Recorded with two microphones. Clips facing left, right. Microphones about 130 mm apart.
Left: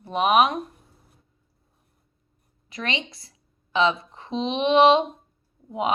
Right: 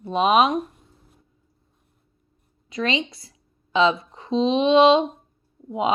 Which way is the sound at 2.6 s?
25° right (ahead or behind).